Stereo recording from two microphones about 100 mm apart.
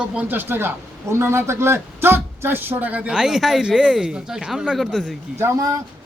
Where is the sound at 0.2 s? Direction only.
20° right (ahead or behind); by 5.1 s 5° left (ahead or behind).